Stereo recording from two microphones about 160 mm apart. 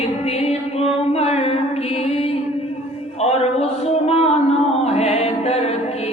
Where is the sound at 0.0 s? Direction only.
40° left (ahead or behind).